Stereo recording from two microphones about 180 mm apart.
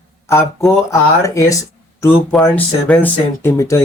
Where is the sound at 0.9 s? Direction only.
15° left (ahead or behind).